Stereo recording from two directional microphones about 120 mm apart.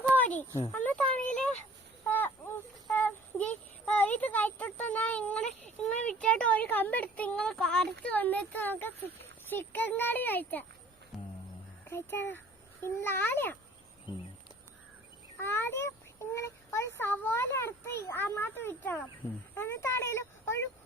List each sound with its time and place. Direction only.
0.1 s a sound: 15° left (ahead or behind)
9.5 s a child's voice: 15° left (ahead or behind)
11.1 s music: centre (ahead or behind)
11.9 s a child's voice: 20° left (ahead or behind)
15.4 s speech: 20° left (ahead or behind)
16.3 s a sound: 20° left (ahead or behind)